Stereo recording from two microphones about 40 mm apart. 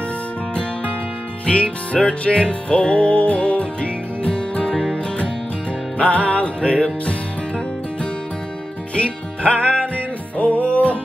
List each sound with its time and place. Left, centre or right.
1.4 s music: left
5.9 s music: left